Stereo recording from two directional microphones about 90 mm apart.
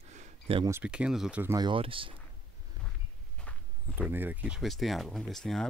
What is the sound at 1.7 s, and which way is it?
Speech, 75° right (ahead or behind).